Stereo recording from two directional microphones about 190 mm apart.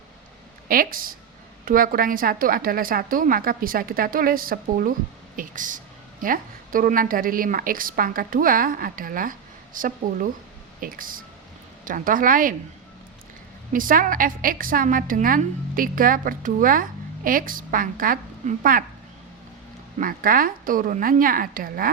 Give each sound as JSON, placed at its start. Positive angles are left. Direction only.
{"t": 0.7, "sound": "a woman's voice", "side_deg": -50}
{"t": 13.7, "sound": "a woman's voice", "side_deg": -45}
{"t": 20.0, "sound": "a woman's voice", "side_deg": -45}